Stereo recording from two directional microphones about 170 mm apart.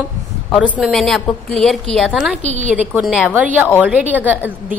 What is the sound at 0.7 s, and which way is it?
A woman's voice, centre (ahead or behind).